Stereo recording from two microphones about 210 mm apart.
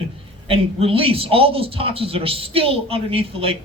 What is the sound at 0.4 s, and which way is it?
Speech, 25° right (ahead or behind).